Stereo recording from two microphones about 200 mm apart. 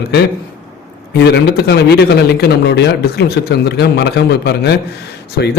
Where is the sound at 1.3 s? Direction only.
55° left (ahead or behind).